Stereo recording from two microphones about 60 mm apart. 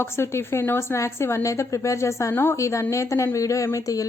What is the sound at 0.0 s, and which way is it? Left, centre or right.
A woman's voice, left.